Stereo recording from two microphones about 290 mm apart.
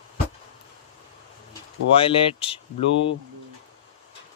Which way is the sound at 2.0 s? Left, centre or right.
Centre.